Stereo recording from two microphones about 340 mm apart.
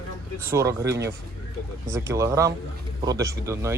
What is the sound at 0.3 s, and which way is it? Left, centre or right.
Speech, centre.